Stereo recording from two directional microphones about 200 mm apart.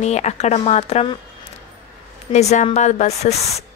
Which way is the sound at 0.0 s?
35° left (ahead or behind).